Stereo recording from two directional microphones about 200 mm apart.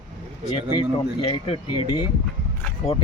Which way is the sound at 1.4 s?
30° left (ahead or behind).